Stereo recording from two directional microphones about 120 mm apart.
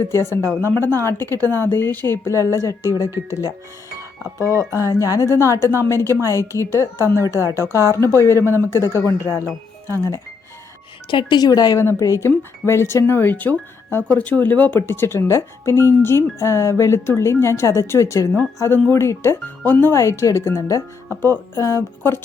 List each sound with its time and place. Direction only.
0.0 s speech: 20° left (ahead or behind)
4.7 s speech: 25° left (ahead or behind)
9.8 s speech: 25° right (ahead or behind)
11.1 s a woman's voice: 40° left (ahead or behind); by 22.2 s 20° left (ahead or behind)